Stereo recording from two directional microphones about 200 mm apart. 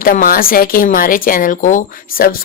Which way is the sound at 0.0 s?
45° left (ahead or behind).